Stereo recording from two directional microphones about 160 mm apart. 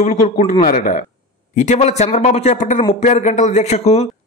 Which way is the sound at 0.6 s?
55° left (ahead or behind).